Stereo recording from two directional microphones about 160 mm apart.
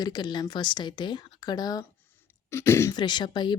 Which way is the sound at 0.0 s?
25° left (ahead or behind).